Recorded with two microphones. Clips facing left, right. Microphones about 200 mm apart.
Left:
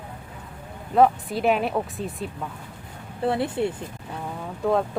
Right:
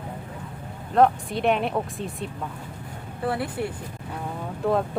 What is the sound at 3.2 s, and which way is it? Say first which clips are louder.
Speech: left 4 dB; 25° left (ahead or behind).